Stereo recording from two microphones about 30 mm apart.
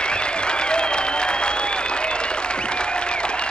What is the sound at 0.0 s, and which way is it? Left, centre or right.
Applause, left.